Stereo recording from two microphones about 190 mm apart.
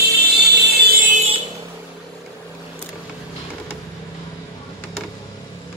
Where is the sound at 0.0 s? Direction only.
60° right (ahead or behind).